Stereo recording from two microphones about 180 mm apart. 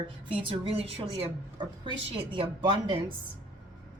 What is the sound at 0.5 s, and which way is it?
A woman's voice, 30° right (ahead or behind).